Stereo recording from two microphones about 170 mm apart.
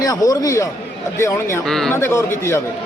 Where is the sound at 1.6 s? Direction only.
Centre (ahead or behind).